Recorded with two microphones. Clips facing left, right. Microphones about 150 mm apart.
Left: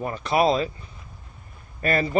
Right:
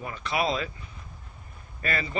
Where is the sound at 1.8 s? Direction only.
45° left (ahead or behind).